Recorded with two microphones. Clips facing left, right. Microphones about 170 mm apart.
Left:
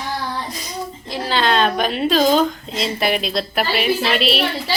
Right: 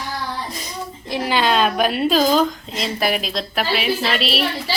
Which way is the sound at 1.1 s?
15° right (ahead or behind).